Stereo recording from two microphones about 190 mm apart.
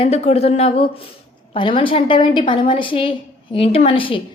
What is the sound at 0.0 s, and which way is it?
A woman's voice, 35° left (ahead or behind).